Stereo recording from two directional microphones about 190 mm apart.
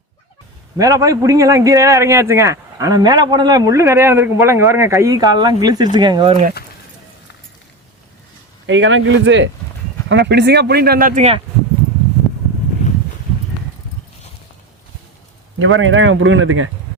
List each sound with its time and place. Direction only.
0.8 s a man's voice: 15° right (ahead or behind)
8.6 s a man's voice: 75° right (ahead or behind); by 11.3 s 40° right (ahead or behind)
12.2 s vehicle: centre (ahead or behind)
15.5 s speech: 90° right